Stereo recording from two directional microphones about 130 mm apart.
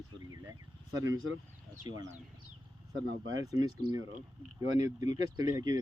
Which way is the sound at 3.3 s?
30° right (ahead or behind).